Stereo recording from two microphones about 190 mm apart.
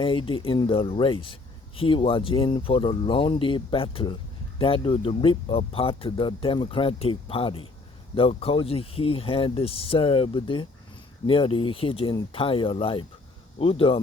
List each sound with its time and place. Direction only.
0.0 s speech: 25° left (ahead or behind)